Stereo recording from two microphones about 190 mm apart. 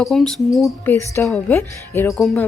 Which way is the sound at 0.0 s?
Centre (ahead or behind).